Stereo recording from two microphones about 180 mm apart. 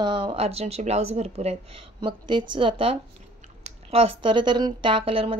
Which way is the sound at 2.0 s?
25° right (ahead or behind).